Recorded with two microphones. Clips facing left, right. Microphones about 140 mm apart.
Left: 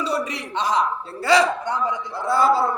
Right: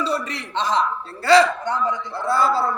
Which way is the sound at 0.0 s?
15° left (ahead or behind).